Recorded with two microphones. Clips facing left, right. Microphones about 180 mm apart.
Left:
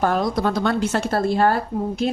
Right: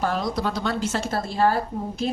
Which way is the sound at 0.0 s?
55° left (ahead or behind).